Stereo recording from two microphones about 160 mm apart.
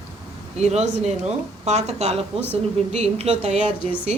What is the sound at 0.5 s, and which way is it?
A woman's voice, 45° right (ahead or behind).